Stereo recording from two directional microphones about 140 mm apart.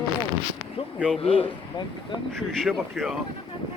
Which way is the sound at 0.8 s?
40° left (ahead or behind).